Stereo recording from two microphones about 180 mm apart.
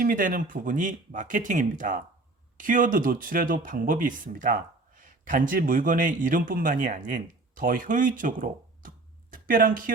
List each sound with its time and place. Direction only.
0.0 s speech: 50° right (ahead or behind)